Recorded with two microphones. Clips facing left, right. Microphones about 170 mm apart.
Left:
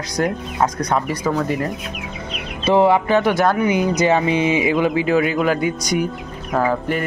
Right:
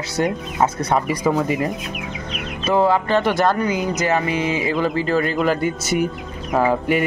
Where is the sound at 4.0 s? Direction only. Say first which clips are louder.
Left 4 dB; 15° left (ahead or behind).